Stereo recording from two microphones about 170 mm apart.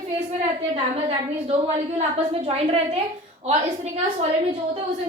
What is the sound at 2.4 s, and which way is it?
Speech, 35° right (ahead or behind).